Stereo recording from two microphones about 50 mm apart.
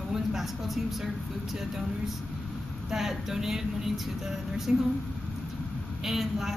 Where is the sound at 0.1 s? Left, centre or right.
Centre.